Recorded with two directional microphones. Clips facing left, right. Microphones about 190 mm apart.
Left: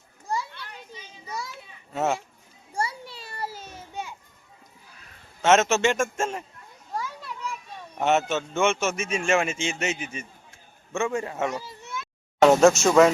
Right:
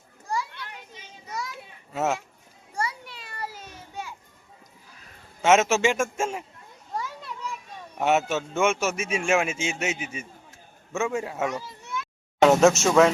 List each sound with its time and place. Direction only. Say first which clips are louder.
1.9 s speech: left 1 dB; 5° right (ahead or behind)
2.7 s children playing: left 1 dB; 30° left (ahead or behind)
5.4 s a man's voice: even; 10° right (ahead or behind)
6.9 s children playing: even; centre (ahead or behind)
7.9 s a man's voice: even; 5° right (ahead or behind)
11.8 s a sound: right 2 dB; 25° left (ahead or behind)
12.4 s speech: left 1 dB; centre (ahead or behind)